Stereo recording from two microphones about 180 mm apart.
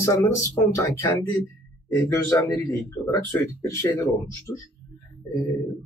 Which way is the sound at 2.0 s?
15° left (ahead or behind).